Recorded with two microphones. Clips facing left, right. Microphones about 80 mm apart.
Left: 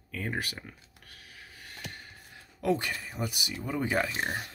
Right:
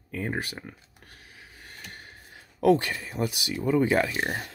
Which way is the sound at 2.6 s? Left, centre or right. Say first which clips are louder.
Right 7 dB; right.